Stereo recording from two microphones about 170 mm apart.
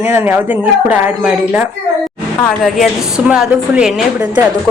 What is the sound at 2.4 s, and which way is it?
A woman's voice, centre (ahead or behind).